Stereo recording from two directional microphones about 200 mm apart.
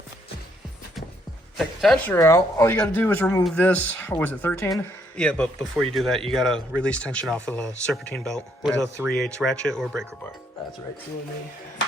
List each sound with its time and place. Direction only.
1.5 s speech: centre (ahead or behind)
2.1 s speech: 15° left (ahead or behind)